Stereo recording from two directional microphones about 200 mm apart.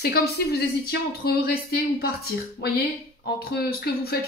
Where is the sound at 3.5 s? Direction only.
50° left (ahead or behind).